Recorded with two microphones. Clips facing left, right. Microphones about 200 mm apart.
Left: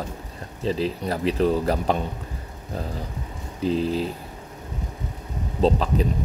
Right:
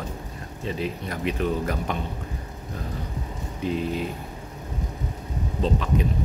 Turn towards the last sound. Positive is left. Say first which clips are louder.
# left 4 dB
turn(degrees=35)  # may be behind; listen again after turning